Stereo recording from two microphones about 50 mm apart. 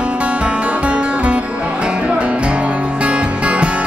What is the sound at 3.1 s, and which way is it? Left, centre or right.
Music, right.